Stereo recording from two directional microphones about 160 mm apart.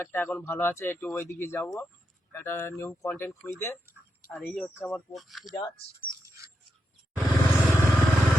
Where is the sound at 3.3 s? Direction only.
Centre (ahead or behind).